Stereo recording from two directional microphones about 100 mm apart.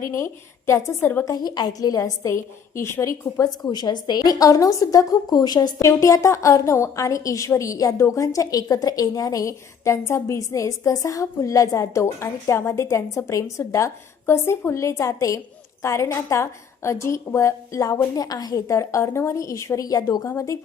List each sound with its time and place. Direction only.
0.0 s a woman's voice: 30° left (ahead or behind)
1.2 s a woman's voice: 40° left (ahead or behind)